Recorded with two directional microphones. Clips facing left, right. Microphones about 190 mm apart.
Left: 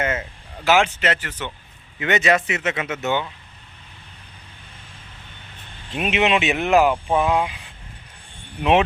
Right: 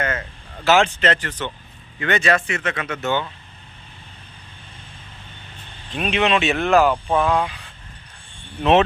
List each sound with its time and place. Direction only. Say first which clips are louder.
0.0 s a sound: left 1 dB; 20° left (ahead or behind)
0.7 s speech: right 1 dB; 10° left (ahead or behind)
6.0 s speech: even; 15° left (ahead or behind)